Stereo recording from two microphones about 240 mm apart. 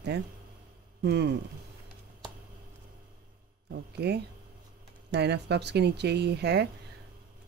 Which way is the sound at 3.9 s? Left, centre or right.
Right.